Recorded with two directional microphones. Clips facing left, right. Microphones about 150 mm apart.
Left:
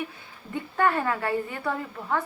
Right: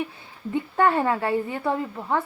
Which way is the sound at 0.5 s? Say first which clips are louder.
Right 4 dB; 25° right (ahead or behind).